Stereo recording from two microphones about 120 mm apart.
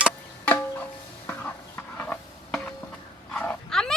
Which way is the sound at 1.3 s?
15° left (ahead or behind).